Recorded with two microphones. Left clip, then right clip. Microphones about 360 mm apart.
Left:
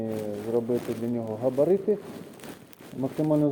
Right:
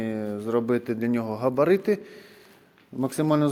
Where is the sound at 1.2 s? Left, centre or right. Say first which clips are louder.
Right 1 dB; right.